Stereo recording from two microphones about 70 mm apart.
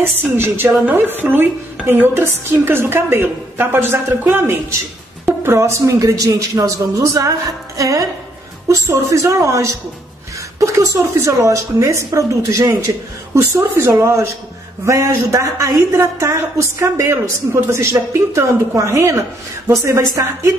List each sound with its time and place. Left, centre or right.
0.0 s a woman's voice: right